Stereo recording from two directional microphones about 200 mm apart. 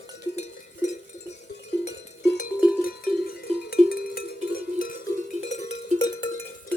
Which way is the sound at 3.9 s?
50° left (ahead or behind).